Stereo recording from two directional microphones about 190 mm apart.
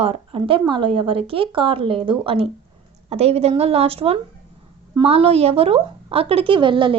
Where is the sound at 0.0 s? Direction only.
30° right (ahead or behind).